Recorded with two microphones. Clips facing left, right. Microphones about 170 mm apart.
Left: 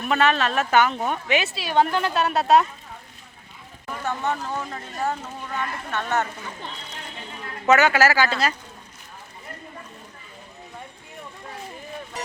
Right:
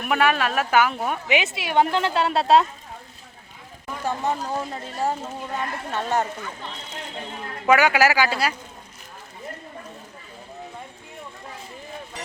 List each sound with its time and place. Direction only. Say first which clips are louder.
0.0 s speech: even; 10° right (ahead or behind); by 2.6 s 25° right (ahead or behind)
4.0 s speech: right 1 dB; 30° right (ahead or behind)
7.7 s speech: even; 10° right (ahead or behind)